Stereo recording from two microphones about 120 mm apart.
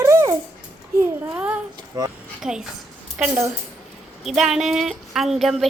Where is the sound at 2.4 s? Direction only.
5° right (ahead or behind).